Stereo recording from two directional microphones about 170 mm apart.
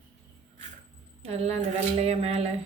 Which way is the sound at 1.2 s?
40° right (ahead or behind).